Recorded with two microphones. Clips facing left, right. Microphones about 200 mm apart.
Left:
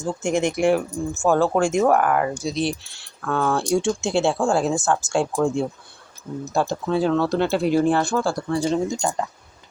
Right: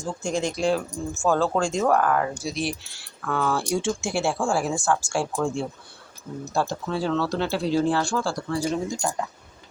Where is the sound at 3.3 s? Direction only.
20° left (ahead or behind).